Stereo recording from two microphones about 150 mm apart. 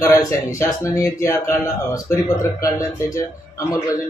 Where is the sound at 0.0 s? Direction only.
20° left (ahead or behind).